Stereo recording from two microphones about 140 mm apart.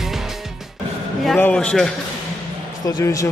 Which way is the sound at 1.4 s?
5° left (ahead or behind).